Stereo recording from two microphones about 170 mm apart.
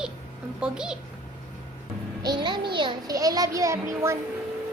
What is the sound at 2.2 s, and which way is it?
A child's voice, 25° right (ahead or behind).